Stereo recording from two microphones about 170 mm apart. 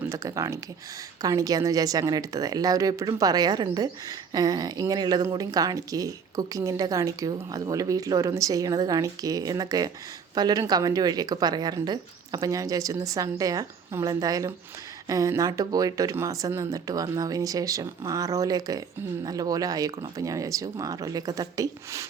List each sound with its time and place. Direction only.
0.0 s speech: 20° right (ahead or behind)